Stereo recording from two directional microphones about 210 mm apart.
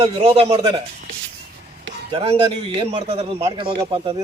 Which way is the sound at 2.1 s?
30° right (ahead or behind).